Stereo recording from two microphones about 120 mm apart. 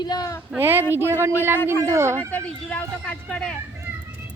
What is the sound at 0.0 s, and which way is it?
Speech, 35° left (ahead or behind).